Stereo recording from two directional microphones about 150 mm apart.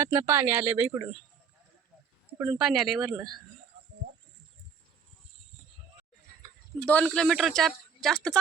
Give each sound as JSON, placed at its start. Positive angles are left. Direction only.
{"t": 0.0, "sound": "speech", "side_deg": -15}
{"t": 2.4, "sound": "speech", "side_deg": -5}
{"t": 6.8, "sound": "speech", "side_deg": 5}